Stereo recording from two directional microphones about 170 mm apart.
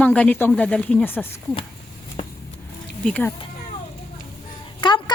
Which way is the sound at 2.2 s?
35° left (ahead or behind).